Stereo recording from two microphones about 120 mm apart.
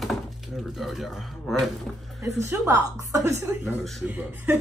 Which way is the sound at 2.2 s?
25° right (ahead or behind).